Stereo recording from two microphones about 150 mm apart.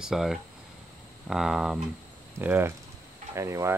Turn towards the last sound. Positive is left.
turn(degrees=-20)  # may be behind; listen again after turning